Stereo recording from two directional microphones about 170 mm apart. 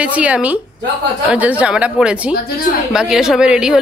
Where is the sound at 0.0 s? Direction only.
10° right (ahead or behind).